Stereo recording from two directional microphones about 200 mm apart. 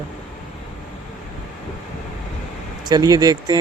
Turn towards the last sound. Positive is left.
turn(degrees=-20)  # may be behind; listen again after turning